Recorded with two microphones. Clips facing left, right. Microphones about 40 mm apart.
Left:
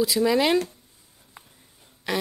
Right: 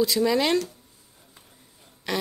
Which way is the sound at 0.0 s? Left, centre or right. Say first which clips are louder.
Left 1 dB; centre.